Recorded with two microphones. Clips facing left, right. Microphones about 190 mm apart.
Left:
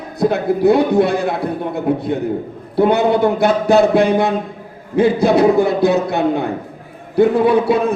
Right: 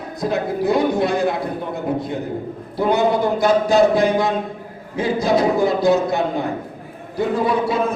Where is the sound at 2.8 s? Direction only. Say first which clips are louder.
Left 4 dB; 60° left (ahead or behind).